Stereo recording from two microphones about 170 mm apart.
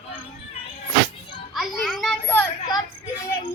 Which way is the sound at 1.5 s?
Centre (ahead or behind).